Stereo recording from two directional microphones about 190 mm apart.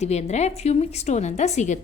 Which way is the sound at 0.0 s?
35° left (ahead or behind).